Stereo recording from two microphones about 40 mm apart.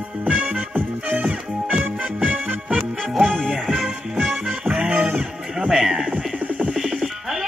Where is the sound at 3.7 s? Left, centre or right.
Centre.